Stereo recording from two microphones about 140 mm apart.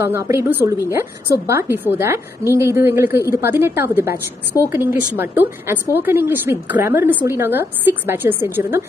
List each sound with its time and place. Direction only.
0.0 s a woman's voice: 20° right (ahead or behind)